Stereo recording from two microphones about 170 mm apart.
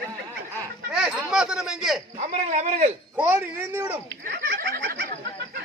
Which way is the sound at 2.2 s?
45° right (ahead or behind).